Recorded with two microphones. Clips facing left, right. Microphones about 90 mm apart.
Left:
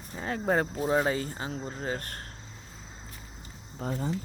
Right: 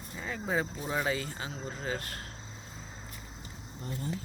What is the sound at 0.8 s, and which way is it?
Speech, 35° left (ahead or behind).